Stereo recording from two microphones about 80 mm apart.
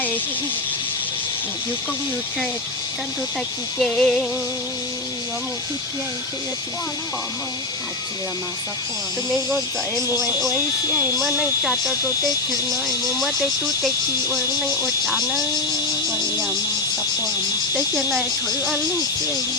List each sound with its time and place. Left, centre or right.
3.8 s a sound: centre
11.2 s speech: centre
14.3 s speech: right
16.1 s speech: right